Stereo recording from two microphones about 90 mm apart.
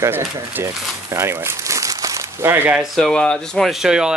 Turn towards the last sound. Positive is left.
turn(degrees=-5)  # may be behind; listen again after turning